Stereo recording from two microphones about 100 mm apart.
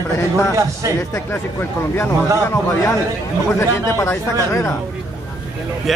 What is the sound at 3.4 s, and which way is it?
Speech, 25° left (ahead or behind).